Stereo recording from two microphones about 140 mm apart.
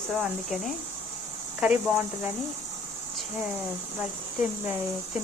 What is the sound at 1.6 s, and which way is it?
Speech, 10° right (ahead or behind).